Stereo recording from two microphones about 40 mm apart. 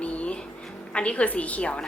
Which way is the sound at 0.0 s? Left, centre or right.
Left.